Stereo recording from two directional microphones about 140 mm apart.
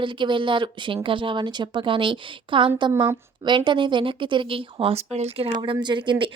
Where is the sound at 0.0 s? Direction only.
35° right (ahead or behind).